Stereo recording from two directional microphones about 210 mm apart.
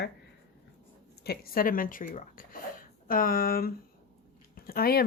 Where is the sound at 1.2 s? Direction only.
50° left (ahead or behind).